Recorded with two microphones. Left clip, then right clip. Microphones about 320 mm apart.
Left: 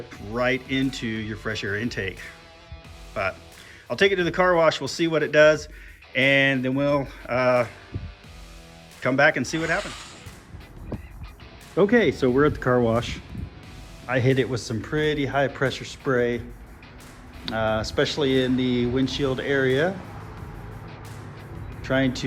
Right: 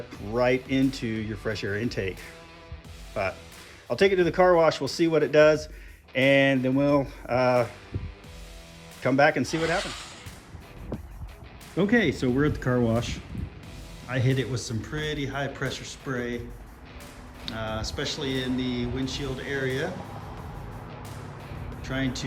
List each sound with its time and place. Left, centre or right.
0.3 s speech: centre
9.0 s speech: centre
11.8 s speech: centre
17.4 s speech: centre
21.8 s speech: centre